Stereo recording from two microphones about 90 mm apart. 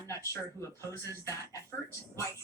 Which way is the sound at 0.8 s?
35° left (ahead or behind).